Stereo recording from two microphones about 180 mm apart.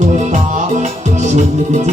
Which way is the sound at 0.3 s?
40° right (ahead or behind).